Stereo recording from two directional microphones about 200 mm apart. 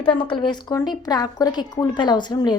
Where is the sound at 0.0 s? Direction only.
25° left (ahead or behind).